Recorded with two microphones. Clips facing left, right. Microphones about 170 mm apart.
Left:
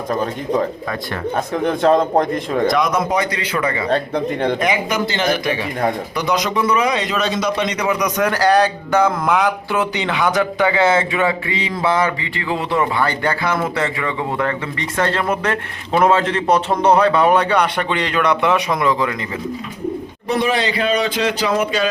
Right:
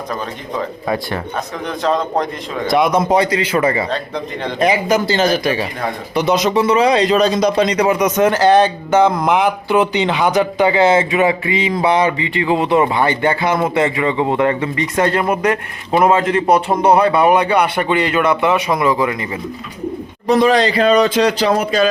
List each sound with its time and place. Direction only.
1.6 s a man's voice: 55° left (ahead or behind)
2.6 s a man's voice: 30° right (ahead or behind)
3.8 s speech: 55° left (ahead or behind)
4.6 s a man's voice: 30° right (ahead or behind); by 19.1 s 5° right (ahead or behind)
20.4 s speech: 40° right (ahead or behind)